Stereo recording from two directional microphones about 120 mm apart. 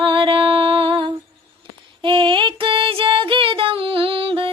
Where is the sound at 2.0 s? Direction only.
45° right (ahead or behind).